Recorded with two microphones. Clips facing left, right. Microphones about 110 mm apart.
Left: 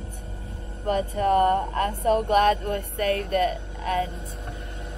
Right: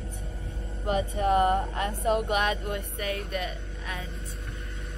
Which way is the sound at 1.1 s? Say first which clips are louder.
Left 3 dB; 45° left (ahead or behind).